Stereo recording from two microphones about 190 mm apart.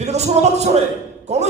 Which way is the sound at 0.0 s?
35° right (ahead or behind).